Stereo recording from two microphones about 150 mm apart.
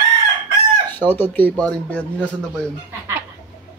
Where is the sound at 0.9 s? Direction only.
15° left (ahead or behind).